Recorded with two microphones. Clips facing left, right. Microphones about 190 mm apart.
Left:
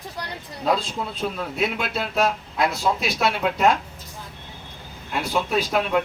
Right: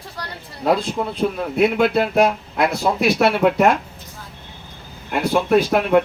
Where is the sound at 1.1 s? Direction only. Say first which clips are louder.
Right 7 dB; 60° right (ahead or behind).